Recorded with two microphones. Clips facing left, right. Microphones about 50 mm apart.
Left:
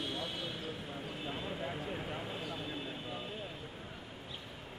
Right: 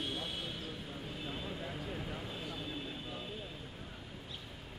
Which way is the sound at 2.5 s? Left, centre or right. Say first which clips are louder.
Left 1 dB; centre.